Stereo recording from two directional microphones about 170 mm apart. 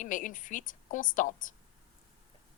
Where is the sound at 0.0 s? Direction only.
50° left (ahead or behind).